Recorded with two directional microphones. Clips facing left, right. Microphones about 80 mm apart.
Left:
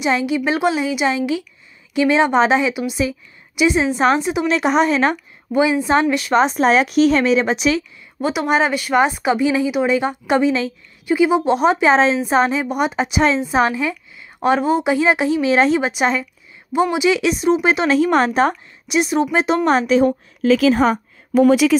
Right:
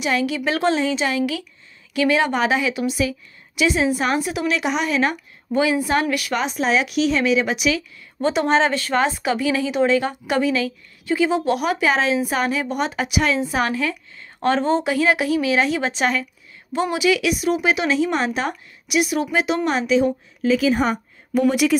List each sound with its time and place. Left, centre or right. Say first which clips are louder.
0.0 s speech: left 3 dB; left
4.6 s a woman's voice: left 7 dB; left
5.5 s a woman's voice: left 3 dB; left
8.2 s speech: even; centre; by 15.8 s left
15.8 s a woman's voice: left 3 dB; centre; by 20.1 s left
20.4 s speech: left 4 dB; left